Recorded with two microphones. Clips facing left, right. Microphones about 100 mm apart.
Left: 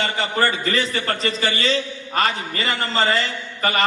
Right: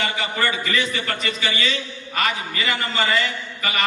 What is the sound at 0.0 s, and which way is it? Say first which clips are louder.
A man's voice: left 3 dB; 35° left (ahead or behind).